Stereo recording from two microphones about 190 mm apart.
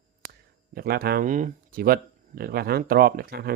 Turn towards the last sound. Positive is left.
turn(degrees=-55)  # may be behind; listen again after turning